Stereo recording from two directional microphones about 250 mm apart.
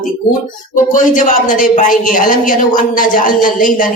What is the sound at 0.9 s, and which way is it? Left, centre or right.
A woman's voice, left.